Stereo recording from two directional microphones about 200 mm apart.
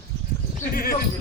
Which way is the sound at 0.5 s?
45° left (ahead or behind).